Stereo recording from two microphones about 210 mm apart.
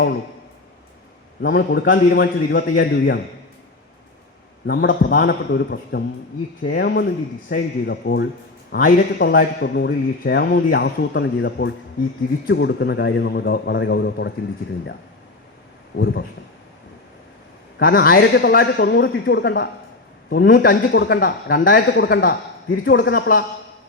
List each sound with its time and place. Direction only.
1.4 s speech: 50° left (ahead or behind)
4.6 s a man's voice: 55° left (ahead or behind)
16.0 s speech: 55° left (ahead or behind)
17.7 s speech: 45° left (ahead or behind)
21.6 s a man's voice: 45° left (ahead or behind)